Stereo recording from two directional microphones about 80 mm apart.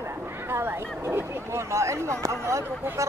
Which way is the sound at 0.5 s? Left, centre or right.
Right.